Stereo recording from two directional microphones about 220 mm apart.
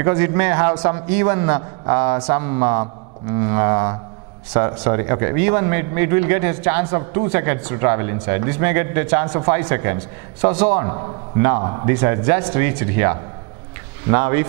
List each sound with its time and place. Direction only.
0.0 s a man's voice: 15° right (ahead or behind)
6.9 s a man's voice: 20° right (ahead or behind)
10.8 s a man's voice: 20° right (ahead or behind)